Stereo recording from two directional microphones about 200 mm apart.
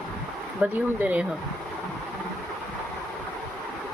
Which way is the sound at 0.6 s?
5° right (ahead or behind).